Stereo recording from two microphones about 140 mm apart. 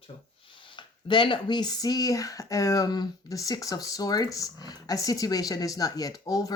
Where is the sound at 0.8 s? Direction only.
35° left (ahead or behind).